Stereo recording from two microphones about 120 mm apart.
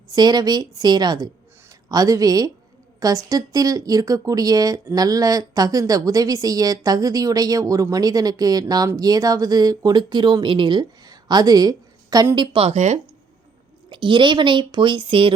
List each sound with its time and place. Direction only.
0.1 s speech: 35° right (ahead or behind)
12.5 s speech: 65° right (ahead or behind)
13.9 s speech: 45° right (ahead or behind)